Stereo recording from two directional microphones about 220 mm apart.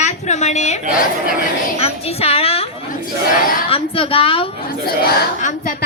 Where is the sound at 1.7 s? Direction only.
25° left (ahead or behind).